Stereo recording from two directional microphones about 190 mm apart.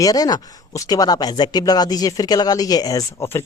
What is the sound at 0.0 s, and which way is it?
Speech, 20° left (ahead or behind).